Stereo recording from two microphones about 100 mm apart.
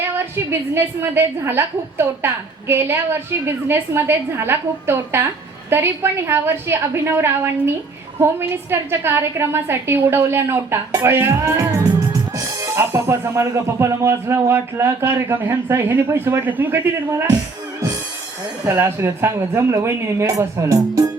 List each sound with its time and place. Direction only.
0.7 s a woman's voice: 20° right (ahead or behind)
18.8 s a woman's voice: 25° right (ahead or behind)